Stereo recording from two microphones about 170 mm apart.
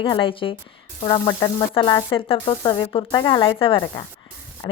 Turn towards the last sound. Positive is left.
turn(degrees=25)  # may be behind; listen again after turning